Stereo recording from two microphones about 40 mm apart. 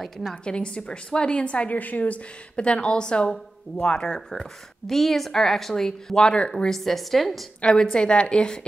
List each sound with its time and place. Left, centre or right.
0.0 s a woman's voice: centre
0.4 s a woman's voice: left
1.8 s a woman's voice: left
2.5 s a woman's voice: left
6.2 s a woman's voice: left
6.7 s a woman's voice: centre
7.6 s a woman's voice: left